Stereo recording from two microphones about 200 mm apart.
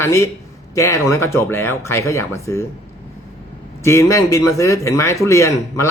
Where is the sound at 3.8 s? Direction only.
15° left (ahead or behind).